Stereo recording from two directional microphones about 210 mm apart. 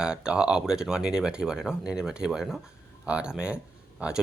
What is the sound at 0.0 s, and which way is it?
Speech, 5° right (ahead or behind).